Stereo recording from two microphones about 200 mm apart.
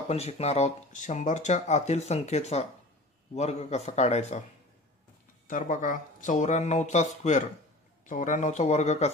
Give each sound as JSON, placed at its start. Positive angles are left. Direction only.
{"t": 0.1, "sound": "speech", "side_deg": 30}
{"t": 5.5, "sound": "speech", "side_deg": 40}
{"t": 8.1, "sound": "speech", "side_deg": 40}